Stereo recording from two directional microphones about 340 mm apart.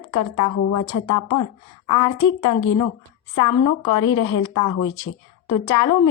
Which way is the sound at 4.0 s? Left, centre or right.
Left.